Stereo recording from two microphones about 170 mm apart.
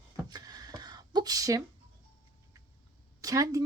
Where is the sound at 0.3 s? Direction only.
25° right (ahead or behind).